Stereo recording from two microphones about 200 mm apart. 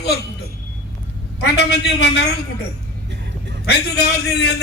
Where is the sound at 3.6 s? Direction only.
55° left (ahead or behind).